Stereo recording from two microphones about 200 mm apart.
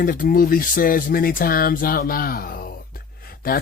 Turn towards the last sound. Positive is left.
turn(degrees=45)  # may be behind; listen again after turning